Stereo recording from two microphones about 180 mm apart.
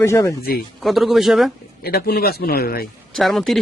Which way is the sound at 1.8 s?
60° left (ahead or behind).